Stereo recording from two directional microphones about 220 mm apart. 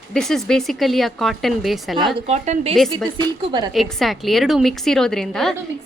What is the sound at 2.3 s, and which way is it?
Speech, 30° right (ahead or behind).